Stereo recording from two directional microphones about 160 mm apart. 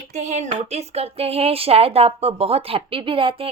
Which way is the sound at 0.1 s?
45° right (ahead or behind).